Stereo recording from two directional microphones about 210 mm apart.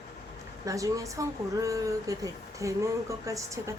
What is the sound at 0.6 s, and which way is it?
A woman's voice, 15° right (ahead or behind).